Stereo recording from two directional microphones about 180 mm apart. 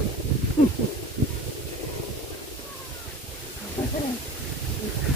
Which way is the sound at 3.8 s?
25° left (ahead or behind).